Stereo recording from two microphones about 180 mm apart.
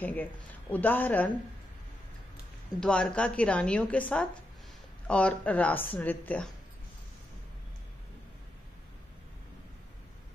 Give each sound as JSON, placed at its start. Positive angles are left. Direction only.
{"t": 0.0, "sound": "a woman's voice", "side_deg": 10}
{"t": 2.8, "sound": "a woman's voice", "side_deg": 5}